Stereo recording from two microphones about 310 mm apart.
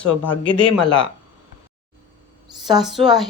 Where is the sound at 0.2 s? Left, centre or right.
Left.